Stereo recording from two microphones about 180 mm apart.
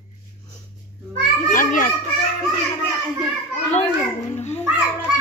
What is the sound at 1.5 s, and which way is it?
Speech, 50° left (ahead or behind).